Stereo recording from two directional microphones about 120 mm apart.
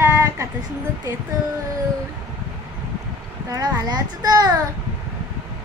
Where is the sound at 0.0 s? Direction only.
25° right (ahead or behind).